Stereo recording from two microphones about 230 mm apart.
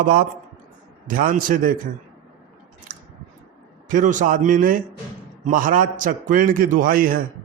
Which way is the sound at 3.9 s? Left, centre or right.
Right.